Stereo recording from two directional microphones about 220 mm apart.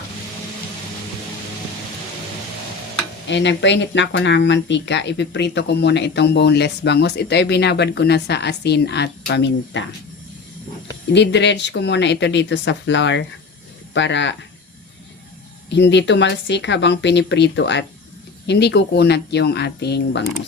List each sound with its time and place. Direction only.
3.2 s speech: 55° left (ahead or behind)
11.1 s speech: 55° left (ahead or behind)
15.7 s speech: 55° left (ahead or behind)